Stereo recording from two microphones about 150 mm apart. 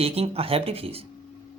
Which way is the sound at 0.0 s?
40° right (ahead or behind).